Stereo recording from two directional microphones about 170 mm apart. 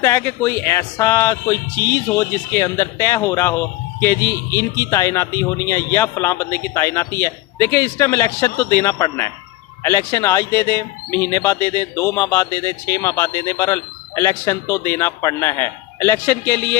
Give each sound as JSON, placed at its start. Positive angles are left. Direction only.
{"t": 0.0, "sound": "speech", "side_deg": 15}